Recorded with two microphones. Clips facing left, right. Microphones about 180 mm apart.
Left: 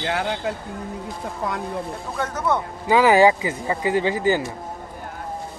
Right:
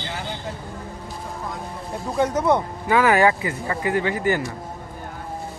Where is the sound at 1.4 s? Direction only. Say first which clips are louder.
Left 8 dB; 75° left (ahead or behind).